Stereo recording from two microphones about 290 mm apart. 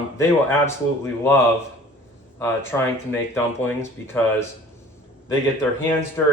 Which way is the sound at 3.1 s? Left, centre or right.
Centre.